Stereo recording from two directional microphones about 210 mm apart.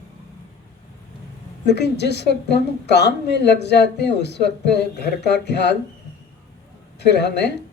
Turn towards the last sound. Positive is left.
turn(degrees=55)  # may be behind; listen again after turning